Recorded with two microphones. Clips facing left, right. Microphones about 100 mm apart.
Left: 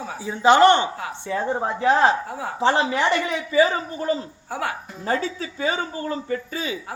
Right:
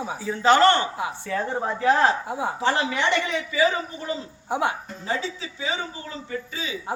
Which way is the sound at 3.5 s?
40° left (ahead or behind).